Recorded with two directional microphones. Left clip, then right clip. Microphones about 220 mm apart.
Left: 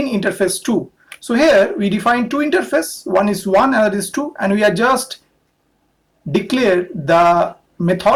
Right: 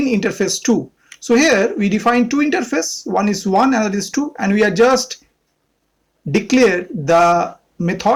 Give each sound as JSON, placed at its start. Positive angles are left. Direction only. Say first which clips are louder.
{"t": 0.0, "sound": "speech", "louder": "left 1 dB", "side_deg": -30}
{"t": 6.3, "sound": "speech", "louder": "right 1 dB", "side_deg": -30}